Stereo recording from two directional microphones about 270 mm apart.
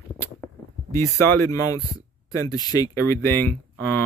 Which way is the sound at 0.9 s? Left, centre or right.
Centre.